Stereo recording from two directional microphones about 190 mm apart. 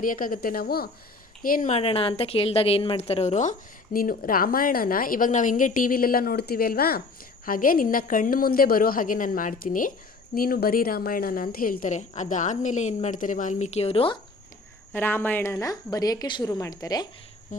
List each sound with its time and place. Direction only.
0.0 s a woman's voice: 45° left (ahead or behind)
3.9 s a woman's voice: 50° left (ahead or behind); by 14.2 s 30° left (ahead or behind)
14.9 s a woman's voice: 10° left (ahead or behind)
17.5 s a woman's voice: 40° left (ahead or behind)